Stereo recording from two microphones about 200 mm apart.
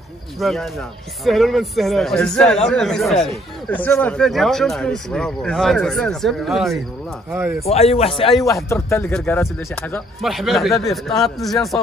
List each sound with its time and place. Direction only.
0.4 s a man's voice: centre (ahead or behind)
7.6 s speech: 30° left (ahead or behind)
8.5 s a man's voice: 15° left (ahead or behind)